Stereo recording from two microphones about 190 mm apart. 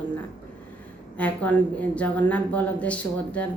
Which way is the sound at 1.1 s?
10° left (ahead or behind).